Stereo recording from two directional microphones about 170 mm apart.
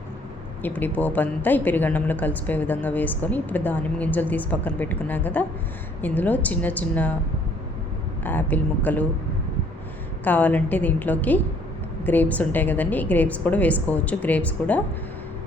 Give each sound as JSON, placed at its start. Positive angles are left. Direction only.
{"t": 0.6, "sound": "a woman's voice", "side_deg": 10}
{"t": 8.2, "sound": "a woman's voice", "side_deg": 10}
{"t": 10.2, "sound": "a woman's voice", "side_deg": 10}